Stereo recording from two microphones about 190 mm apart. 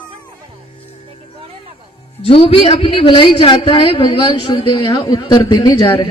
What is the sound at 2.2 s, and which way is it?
A man's voice, 30° left (ahead or behind).